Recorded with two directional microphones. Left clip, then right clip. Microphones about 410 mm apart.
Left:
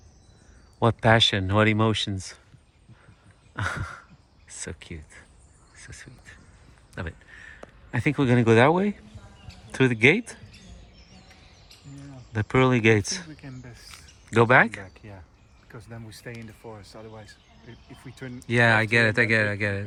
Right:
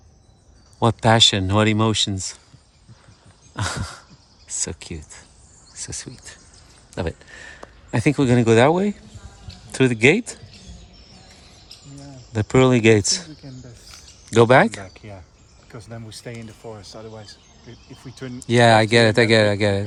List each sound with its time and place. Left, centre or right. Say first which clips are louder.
0.8 s speech: right 4 dB; centre
3.5 s a sound: right 3 dB; centre
4.4 s speech: right 9 dB; centre
12.3 s speech: right 5 dB; centre
13.8 s a sound: right 4 dB; centre
14.8 s speech: right 5 dB; right
18.3 s speech: right 6 dB; centre